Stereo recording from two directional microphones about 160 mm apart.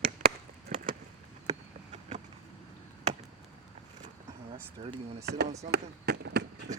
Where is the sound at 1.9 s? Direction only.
40° right (ahead or behind).